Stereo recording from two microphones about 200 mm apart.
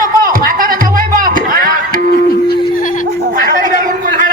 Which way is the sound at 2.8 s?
40° left (ahead or behind).